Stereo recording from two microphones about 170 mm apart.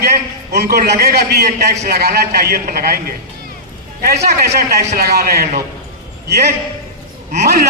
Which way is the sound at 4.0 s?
65° right (ahead or behind).